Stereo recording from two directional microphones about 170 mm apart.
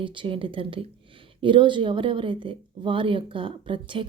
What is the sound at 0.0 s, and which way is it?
Speech, 30° right (ahead or behind).